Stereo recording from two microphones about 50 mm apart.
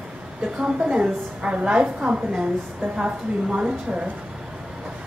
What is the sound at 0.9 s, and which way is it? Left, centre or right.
A woman's voice, right.